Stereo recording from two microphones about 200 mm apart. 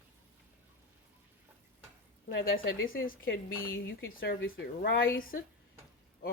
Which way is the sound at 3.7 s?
65° left (ahead or behind).